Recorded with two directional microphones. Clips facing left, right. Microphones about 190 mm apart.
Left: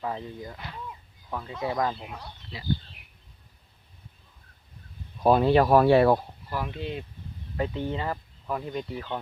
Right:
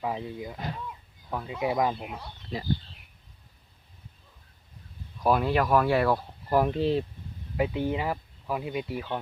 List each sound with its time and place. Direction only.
0.0 s speech: 10° right (ahead or behind)
2.5 s speech: 45° right (ahead or behind)
5.2 s speech: 25° left (ahead or behind)
6.5 s speech: 40° right (ahead or behind)
7.5 s speech: 10° right (ahead or behind)